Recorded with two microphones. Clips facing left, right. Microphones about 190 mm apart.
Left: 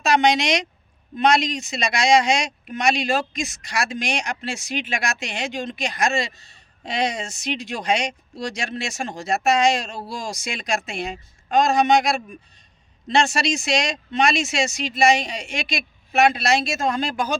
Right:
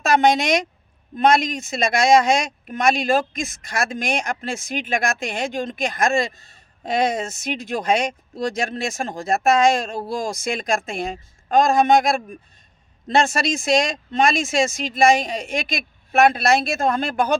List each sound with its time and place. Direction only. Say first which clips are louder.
0.0 s speech: right 2 dB; 50° right (ahead or behind)